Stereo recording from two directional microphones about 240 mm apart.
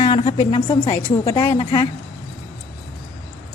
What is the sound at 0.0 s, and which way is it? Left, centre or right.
Music, left.